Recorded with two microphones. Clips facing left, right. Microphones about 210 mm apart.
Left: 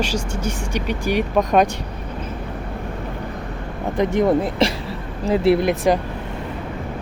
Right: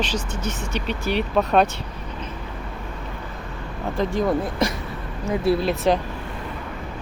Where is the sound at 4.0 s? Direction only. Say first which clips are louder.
Left 5 dB; 20° left (ahead or behind).